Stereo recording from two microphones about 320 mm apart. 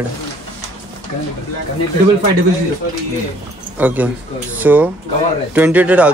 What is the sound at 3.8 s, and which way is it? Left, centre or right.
Speech, centre.